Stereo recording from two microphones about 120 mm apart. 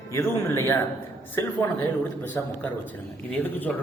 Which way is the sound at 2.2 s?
15° left (ahead or behind).